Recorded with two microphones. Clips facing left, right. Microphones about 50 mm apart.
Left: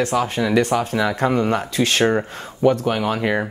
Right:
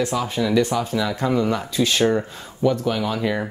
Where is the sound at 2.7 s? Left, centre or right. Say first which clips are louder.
Left 2 dB; left.